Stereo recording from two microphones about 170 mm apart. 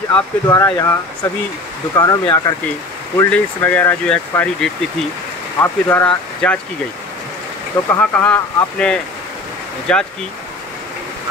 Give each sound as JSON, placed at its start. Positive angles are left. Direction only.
{"t": 0.1, "sound": "speech", "side_deg": 20}
{"t": 2.0, "sound": "speech", "side_deg": 25}
{"t": 3.2, "sound": "speech", "side_deg": 10}
{"t": 7.8, "sound": "speech", "side_deg": 25}
{"t": 8.2, "sound": "speech", "side_deg": 5}